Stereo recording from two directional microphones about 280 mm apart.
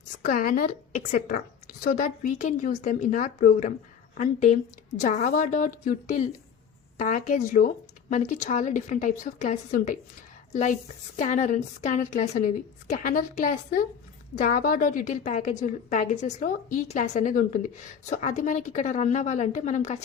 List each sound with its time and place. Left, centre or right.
0.3 s a woman's voice: left